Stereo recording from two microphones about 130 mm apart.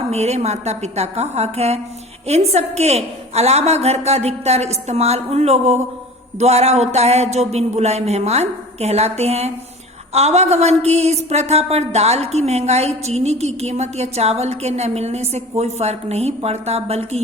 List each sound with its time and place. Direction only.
0.1 s a woman's voice: 55° right (ahead or behind)